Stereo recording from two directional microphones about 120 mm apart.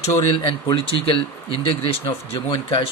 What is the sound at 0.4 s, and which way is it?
Speech, 45° left (ahead or behind).